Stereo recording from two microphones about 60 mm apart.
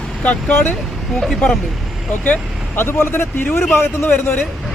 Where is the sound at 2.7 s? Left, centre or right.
Left.